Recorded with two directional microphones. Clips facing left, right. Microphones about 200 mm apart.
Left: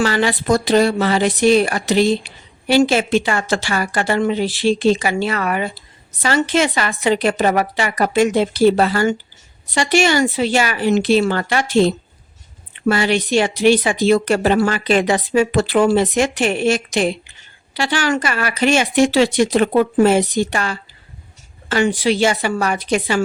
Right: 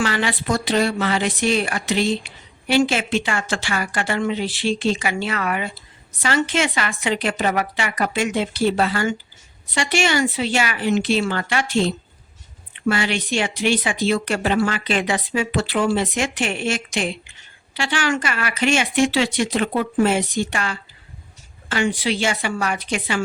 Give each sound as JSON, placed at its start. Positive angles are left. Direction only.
{"t": 0.0, "sound": "speech", "side_deg": 40}
{"t": 12.9, "sound": "speech", "side_deg": 40}